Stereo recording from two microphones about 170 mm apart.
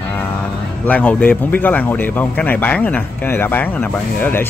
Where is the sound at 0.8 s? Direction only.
10° left (ahead or behind).